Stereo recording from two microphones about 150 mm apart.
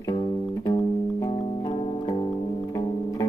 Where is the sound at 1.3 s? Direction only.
45° left (ahead or behind).